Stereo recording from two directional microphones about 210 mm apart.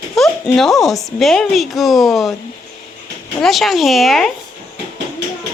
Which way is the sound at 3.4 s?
Centre (ahead or behind).